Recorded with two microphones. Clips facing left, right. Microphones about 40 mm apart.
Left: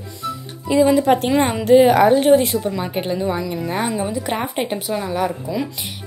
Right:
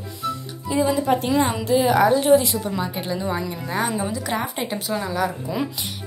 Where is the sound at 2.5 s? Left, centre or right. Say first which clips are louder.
Left 4 dB; centre.